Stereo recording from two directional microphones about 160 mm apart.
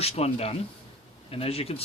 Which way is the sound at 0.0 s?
40° left (ahead or behind).